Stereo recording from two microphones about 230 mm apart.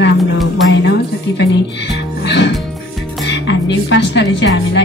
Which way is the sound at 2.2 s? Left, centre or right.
Left.